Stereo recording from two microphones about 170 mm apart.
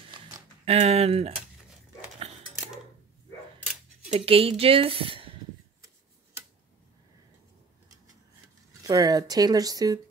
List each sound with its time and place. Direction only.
0.7 s speech: 35° right (ahead or behind)
4.1 s speech: 35° right (ahead or behind)
8.8 s speech: 20° right (ahead or behind)